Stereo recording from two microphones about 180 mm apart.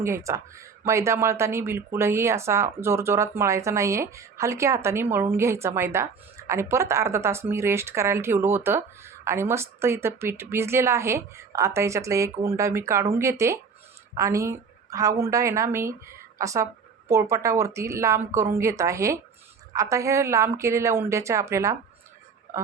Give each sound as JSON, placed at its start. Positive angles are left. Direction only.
{"t": 0.0, "sound": "speech", "side_deg": -15}